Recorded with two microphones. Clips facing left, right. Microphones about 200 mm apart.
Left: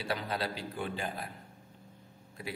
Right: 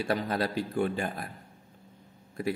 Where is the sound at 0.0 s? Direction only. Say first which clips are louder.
Right 6 dB; 50° right (ahead or behind).